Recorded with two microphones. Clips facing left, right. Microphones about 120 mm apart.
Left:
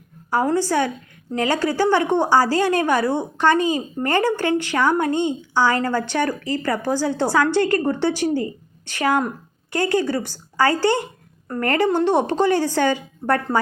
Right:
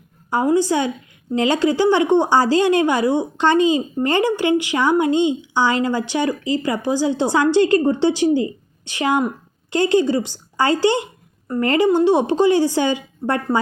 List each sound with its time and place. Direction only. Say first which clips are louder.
0.3 s a woman's voice: right 3 dB; 20° right (ahead or behind)